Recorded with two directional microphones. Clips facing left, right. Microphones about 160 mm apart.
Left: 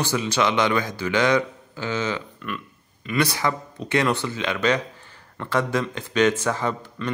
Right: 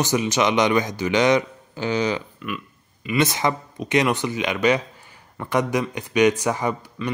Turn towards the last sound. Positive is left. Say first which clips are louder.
# right 1 dB
turn(degrees=-10)  # may be behind; listen again after turning